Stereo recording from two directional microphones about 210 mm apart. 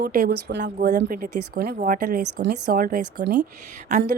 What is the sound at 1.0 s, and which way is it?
Speech, 40° right (ahead or behind).